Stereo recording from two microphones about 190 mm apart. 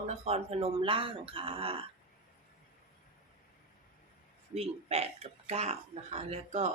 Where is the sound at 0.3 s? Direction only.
35° right (ahead or behind).